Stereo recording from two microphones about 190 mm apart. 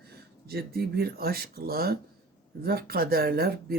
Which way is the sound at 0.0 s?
55° right (ahead or behind).